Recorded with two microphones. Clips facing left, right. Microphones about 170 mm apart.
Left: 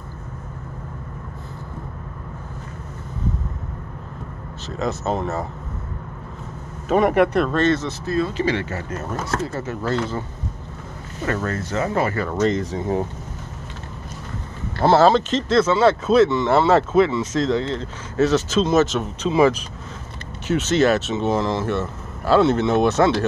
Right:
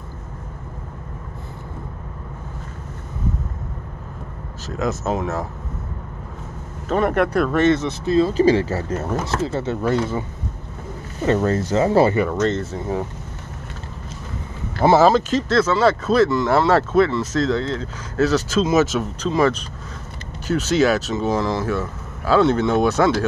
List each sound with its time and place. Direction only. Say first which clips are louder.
4.7 s speech: right 1 dB; 5° right (ahead or behind)
6.9 s speech: left 2 dB; 10° left (ahead or behind)
7.5 s speech: right 2 dB; 15° right (ahead or behind)
8.3 s speech: right 7 dB; 40° right (ahead or behind)
9.8 s speech: right 2 dB; 15° right (ahead or behind)
11.2 s speech: right 6 dB; 25° right (ahead or behind)
12.4 s speech: left 1 dB; 10° left (ahead or behind)
14.8 s speech: right 1 dB; 10° right (ahead or behind)
20.4 s speech: even; centre (ahead or behind)